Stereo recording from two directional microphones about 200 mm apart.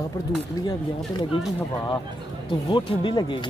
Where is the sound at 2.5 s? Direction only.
25° left (ahead or behind).